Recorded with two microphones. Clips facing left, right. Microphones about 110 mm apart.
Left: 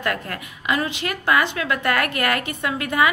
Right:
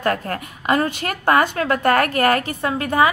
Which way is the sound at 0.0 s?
40° right (ahead or behind).